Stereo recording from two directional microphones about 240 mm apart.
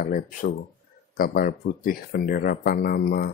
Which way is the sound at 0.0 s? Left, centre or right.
Left.